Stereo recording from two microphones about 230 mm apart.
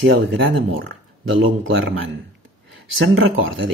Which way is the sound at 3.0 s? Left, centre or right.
Right.